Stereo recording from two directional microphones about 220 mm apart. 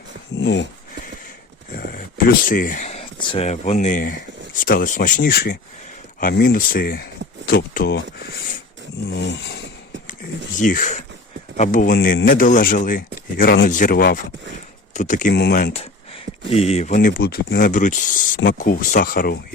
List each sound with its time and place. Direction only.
0.3 s dog: 55° left (ahead or behind)
1.7 s speech: 40° left (ahead or behind)
9.0 s a sound: 50° left (ahead or behind)
10.6 s speech: 35° left (ahead or behind)
15.7 s a sound: 25° left (ahead or behind)
16.5 s speech: 30° left (ahead or behind)